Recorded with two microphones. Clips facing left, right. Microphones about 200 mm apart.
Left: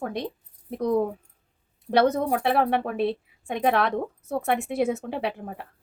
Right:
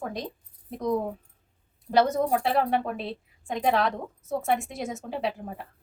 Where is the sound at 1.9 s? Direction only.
60° left (ahead or behind).